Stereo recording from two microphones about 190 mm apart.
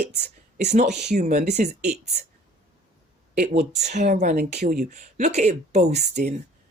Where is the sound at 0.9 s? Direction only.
60° right (ahead or behind).